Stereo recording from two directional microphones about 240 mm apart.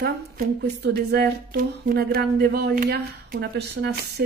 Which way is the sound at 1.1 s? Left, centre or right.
Right.